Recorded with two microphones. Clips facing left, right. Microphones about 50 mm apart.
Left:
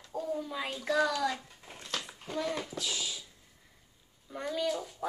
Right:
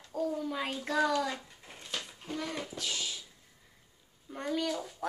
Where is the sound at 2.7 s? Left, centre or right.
Right.